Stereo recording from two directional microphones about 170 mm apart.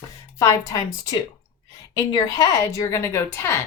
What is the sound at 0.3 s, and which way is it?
A woman's voice, 20° left (ahead or behind).